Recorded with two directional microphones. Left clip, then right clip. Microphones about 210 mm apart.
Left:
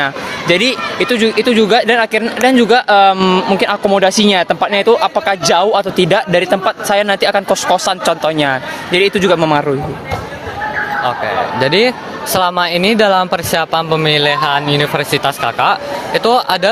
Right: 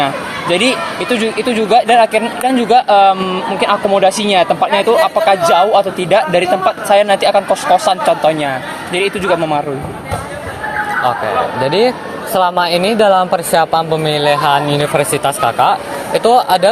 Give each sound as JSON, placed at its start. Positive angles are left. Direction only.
{"t": 0.0, "sound": "speech", "side_deg": 50}
{"t": 11.6, "sound": "speech", "side_deg": 35}